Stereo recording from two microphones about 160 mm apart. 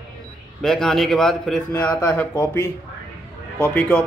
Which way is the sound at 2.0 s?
15° left (ahead or behind).